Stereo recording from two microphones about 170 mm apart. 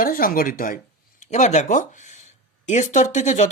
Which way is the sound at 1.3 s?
45° left (ahead or behind).